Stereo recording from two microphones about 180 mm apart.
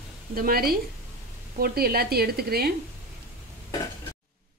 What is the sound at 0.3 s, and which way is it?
Speech, 55° right (ahead or behind).